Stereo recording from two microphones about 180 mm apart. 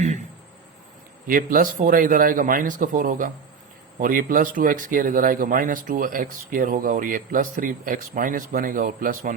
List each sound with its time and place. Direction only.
1.3 s speech: 50° right (ahead or behind)